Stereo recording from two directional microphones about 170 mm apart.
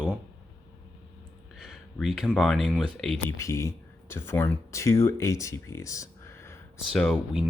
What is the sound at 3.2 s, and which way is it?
Speech, 15° left (ahead or behind).